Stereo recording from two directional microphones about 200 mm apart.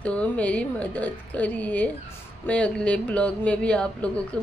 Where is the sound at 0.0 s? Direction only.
5° left (ahead or behind).